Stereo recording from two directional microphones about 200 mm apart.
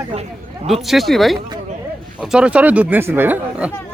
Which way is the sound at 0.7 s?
Centre (ahead or behind).